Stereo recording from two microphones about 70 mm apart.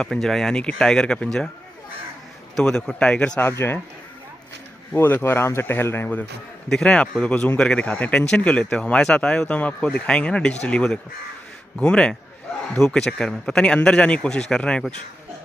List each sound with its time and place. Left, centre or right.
0.0 s speech: centre
2.5 s speech: centre
3.3 s speech: left
4.9 s speech: left
6.7 s speech: centre